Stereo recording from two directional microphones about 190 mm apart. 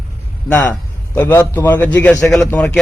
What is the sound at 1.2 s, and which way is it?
A man's voice, 10° left (ahead or behind).